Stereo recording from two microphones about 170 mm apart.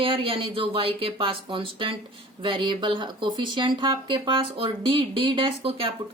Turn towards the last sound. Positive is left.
turn(degrees=-30)  # may be behind; listen again after turning